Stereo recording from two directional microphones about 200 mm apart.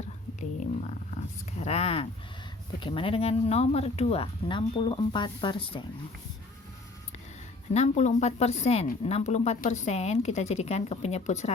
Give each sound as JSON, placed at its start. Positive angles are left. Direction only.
{"t": 1.5, "sound": "a sound", "side_deg": 30}
{"t": 2.8, "sound": "speech", "side_deg": 25}
{"t": 7.7, "sound": "a woman's voice", "side_deg": 35}